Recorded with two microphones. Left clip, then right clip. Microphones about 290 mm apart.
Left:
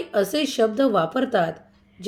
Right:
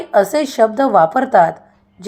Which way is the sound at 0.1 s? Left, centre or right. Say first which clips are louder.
Right 9 dB; centre.